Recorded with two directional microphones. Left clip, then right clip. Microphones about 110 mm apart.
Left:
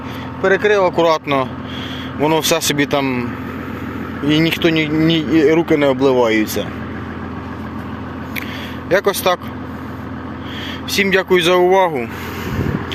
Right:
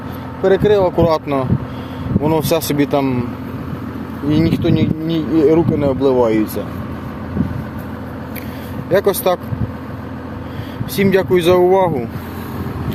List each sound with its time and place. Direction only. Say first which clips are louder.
0.4 s speech: right 1 dB; 40° right (ahead or behind)
1.1 s speech: even; 15° right (ahead or behind)
4.3 s speech: left 2 dB; centre (ahead or behind)
8.9 s speech: even; 15° right (ahead or behind)
10.9 s speech: even; 20° right (ahead or behind)